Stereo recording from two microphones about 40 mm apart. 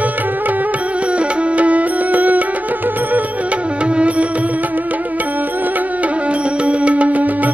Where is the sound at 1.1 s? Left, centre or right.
Right.